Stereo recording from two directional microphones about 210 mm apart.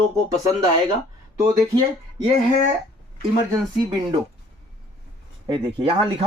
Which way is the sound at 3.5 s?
15° right (ahead or behind).